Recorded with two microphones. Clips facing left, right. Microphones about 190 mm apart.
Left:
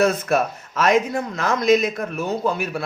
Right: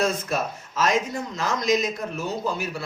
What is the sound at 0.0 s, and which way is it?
Speech, 60° left (ahead or behind).